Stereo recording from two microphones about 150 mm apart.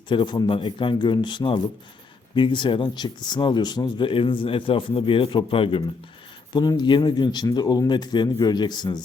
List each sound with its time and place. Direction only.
0.1 s speech: 30° left (ahead or behind)